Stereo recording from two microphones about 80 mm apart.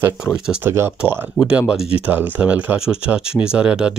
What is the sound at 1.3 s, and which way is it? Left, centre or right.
Speech, centre.